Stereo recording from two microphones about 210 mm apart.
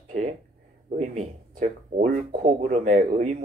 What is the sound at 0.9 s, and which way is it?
Speech, 35° right (ahead or behind).